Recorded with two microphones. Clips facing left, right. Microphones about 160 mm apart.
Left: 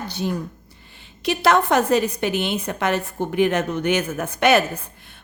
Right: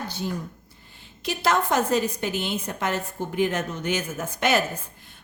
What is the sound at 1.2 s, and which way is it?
A woman's voice, 70° left (ahead or behind).